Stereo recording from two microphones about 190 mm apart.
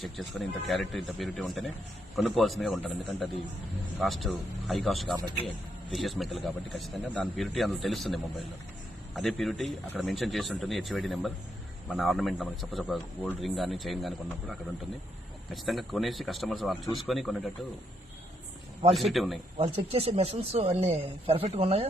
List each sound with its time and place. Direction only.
0.0 s a man's voice: centre (ahead or behind)
15.5 s a man's voice: centre (ahead or behind)
18.9 s a man's voice: centre (ahead or behind)
19.5 s speech: 30° right (ahead or behind)